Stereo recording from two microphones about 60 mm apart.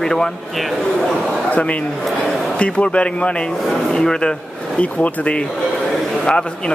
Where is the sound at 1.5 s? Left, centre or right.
Left.